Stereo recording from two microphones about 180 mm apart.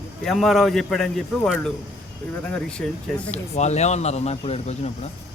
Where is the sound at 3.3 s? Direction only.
40° left (ahead or behind).